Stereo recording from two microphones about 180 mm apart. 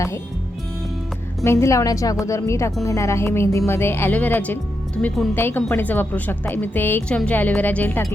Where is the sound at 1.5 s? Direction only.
15° left (ahead or behind).